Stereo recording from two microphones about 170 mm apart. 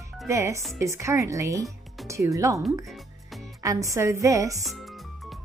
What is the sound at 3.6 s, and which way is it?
Speech, 20° right (ahead or behind).